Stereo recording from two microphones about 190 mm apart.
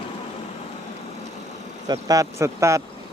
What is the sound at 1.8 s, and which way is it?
Speech, 20° right (ahead or behind).